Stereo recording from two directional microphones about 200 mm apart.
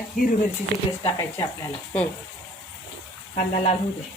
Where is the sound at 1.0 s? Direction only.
15° left (ahead or behind).